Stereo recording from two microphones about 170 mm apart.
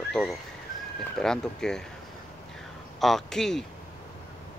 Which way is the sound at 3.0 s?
Centre (ahead or behind).